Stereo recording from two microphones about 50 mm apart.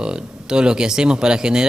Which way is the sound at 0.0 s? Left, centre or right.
Centre.